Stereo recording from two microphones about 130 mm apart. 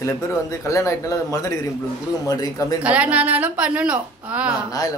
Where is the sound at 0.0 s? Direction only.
20° left (ahead or behind).